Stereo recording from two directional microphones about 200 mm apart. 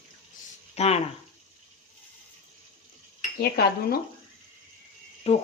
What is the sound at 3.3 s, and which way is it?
Speech, 50° left (ahead or behind).